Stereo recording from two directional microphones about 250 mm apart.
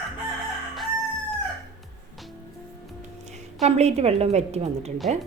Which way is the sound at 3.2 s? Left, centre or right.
Right.